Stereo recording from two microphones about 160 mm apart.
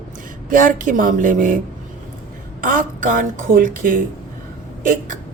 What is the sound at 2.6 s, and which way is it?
A woman's voice, 60° right (ahead or behind).